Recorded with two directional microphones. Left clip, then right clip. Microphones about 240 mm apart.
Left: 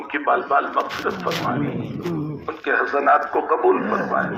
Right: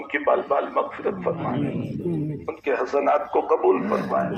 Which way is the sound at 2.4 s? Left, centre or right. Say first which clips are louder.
Left 5 dB; centre.